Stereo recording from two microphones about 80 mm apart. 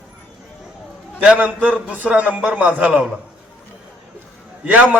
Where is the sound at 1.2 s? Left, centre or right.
Centre.